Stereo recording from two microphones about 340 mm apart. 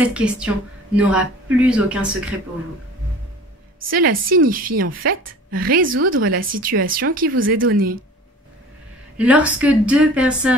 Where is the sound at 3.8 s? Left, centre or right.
Right.